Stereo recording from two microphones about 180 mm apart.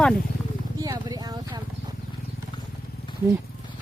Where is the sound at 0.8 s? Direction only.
20° right (ahead or behind).